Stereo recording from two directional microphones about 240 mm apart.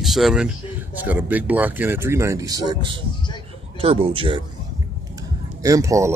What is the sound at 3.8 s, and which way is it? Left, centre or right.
Speech, right.